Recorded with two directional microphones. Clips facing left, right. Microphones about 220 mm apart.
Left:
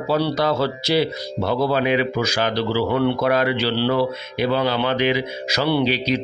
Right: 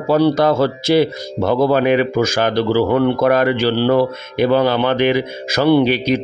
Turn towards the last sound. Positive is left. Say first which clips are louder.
# right 6 dB
turn(degrees=-50)  # may be behind; listen again after turning